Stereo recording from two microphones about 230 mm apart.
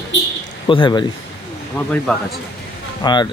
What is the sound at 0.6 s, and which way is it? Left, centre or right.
Speech, left.